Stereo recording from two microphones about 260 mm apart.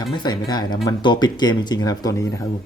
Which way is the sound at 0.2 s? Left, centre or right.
Centre.